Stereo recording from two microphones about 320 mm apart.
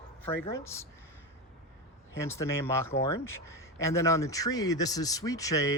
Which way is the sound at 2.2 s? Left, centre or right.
Centre.